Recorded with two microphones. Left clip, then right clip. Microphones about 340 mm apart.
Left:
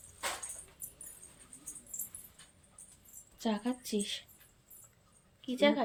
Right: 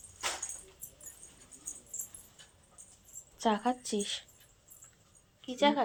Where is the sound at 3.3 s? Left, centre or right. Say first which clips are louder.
Right 6 dB; centre.